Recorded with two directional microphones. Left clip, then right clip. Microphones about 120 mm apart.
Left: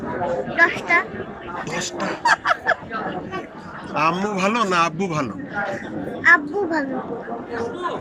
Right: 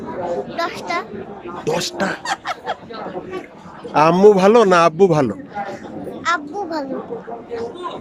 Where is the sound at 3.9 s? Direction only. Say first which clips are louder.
Right 10 dB; 90° right.